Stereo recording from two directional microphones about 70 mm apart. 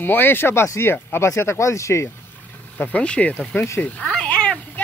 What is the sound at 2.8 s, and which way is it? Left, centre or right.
Speech, left.